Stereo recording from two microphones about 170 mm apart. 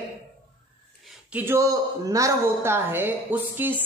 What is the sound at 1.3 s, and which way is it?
Speech, 15° right (ahead or behind).